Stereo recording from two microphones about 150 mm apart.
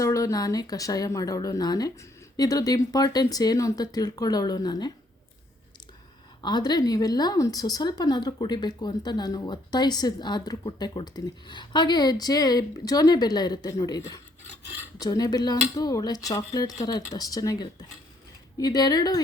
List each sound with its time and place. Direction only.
0.0 s speech: 20° left (ahead or behind)
6.4 s speech: 30° left (ahead or behind)